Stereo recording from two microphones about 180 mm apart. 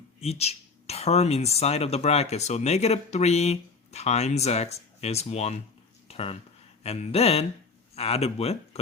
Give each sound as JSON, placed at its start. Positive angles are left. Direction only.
{"t": 0.2, "sound": "speech", "side_deg": 35}